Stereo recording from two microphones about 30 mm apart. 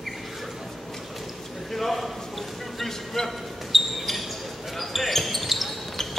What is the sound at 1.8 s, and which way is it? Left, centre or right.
Speech, centre.